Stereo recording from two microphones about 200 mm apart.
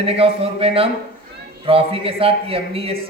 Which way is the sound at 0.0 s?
30° right (ahead or behind).